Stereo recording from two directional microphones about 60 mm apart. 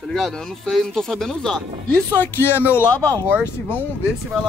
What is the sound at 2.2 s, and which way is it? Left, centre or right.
Speech, left.